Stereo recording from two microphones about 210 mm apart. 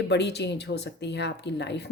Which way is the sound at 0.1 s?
55° left (ahead or behind).